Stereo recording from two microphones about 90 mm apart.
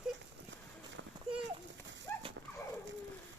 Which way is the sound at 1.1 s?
55° right (ahead or behind).